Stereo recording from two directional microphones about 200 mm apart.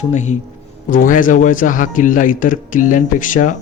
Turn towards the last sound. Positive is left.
turn(degrees=40)  # may be behind; listen again after turning